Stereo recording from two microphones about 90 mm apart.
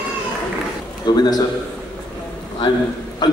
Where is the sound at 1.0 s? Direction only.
55° left (ahead or behind).